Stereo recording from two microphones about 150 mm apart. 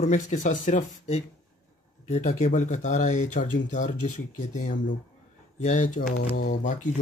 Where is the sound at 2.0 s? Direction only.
50° left (ahead or behind).